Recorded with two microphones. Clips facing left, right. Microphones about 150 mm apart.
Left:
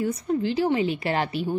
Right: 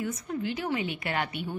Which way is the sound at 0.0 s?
30° left (ahead or behind).